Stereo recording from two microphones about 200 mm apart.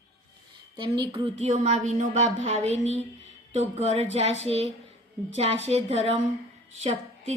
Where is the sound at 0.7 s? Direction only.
25° right (ahead or behind).